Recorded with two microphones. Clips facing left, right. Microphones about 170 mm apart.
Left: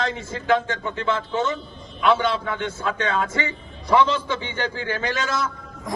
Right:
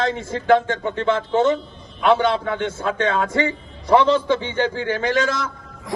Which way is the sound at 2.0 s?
35° right (ahead or behind).